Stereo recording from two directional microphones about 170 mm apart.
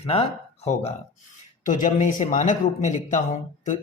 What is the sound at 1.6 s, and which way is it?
Speech, 50° left (ahead or behind).